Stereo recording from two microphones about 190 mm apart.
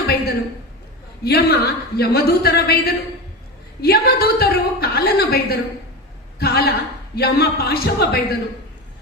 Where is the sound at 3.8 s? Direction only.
55° left (ahead or behind).